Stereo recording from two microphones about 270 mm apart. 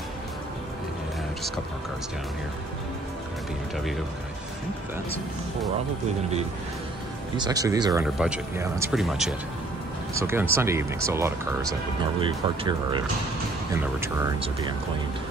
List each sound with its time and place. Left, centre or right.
7.3 s speech: centre